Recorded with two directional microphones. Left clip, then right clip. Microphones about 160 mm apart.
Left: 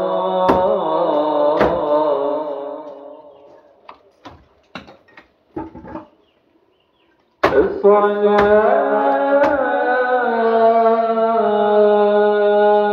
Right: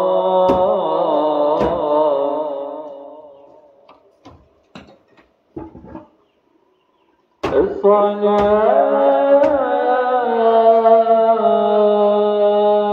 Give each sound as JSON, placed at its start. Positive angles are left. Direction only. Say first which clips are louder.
{"t": 0.0, "sound": "music", "louder": "right 3 dB", "side_deg": -25}
{"t": 1.8, "sound": "mantra", "louder": "right 1 dB", "side_deg": -30}
{"t": 4.7, "sound": "a sound", "louder": "left 5 dB", "side_deg": -5}
{"t": 7.5, "sound": "a sound", "louder": "right 1 dB", "side_deg": -25}
{"t": 8.5, "sound": "music", "louder": "even", "side_deg": -25}
{"t": 9.6, "sound": "carnatic music", "louder": "right 1 dB", "side_deg": -25}